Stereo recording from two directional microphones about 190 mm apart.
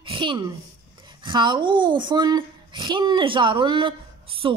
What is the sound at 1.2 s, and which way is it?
A woman's voice, 25° right (ahead or behind).